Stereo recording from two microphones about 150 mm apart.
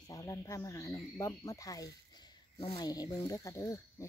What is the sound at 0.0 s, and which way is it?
Speech, 25° left (ahead or behind).